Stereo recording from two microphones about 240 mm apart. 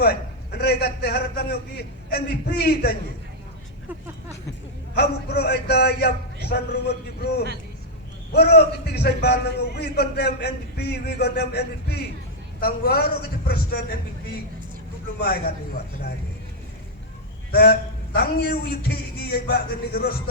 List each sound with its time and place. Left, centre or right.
0.0 s a man's voice: left
4.9 s a man's voice: left
8.3 s a man's voice: left
15.2 s a man's voice: left
17.5 s a man's voice: left